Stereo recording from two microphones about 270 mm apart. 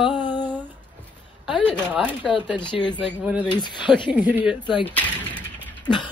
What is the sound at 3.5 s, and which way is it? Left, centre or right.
Speech, centre.